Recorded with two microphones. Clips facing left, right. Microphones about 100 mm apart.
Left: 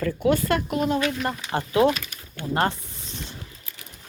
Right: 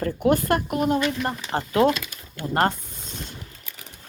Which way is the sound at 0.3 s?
45° right (ahead or behind).